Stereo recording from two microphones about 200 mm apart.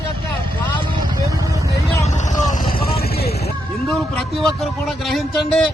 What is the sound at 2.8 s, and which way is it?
Vehicle, 50° left (ahead or behind).